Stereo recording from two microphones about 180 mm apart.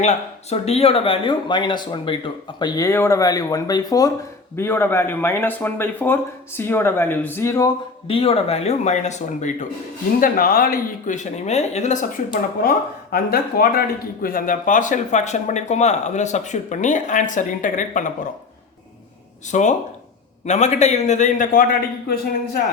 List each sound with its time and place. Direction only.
0.0 s speech: 35° left (ahead or behind); by 7.7 s 15° left (ahead or behind)
8.0 s speech: 30° left (ahead or behind)
10.2 s speech: 55° left (ahead or behind)
12.3 s speech: 55° left (ahead or behind)
19.5 s speech: 40° left (ahead or behind)